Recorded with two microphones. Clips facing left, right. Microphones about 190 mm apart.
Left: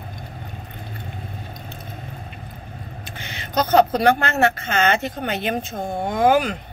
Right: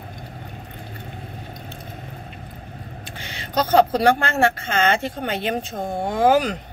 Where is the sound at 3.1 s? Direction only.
35° right (ahead or behind).